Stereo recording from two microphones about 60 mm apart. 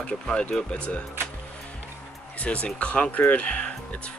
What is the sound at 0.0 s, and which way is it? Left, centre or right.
Speech, centre.